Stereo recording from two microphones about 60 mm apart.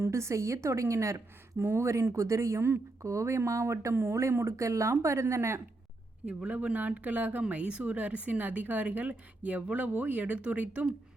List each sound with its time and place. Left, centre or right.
0.0 s a woman's voice: right
1.5 s a woman's voice: right
6.2 s speech: right